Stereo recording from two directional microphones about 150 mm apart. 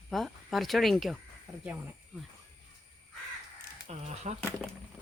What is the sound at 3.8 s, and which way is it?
Speech, 45° right (ahead or behind).